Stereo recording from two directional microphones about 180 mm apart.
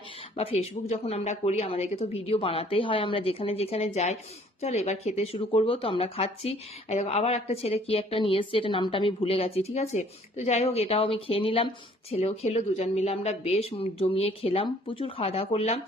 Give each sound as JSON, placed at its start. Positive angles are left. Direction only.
{"t": 0.3, "sound": "speech", "side_deg": 35}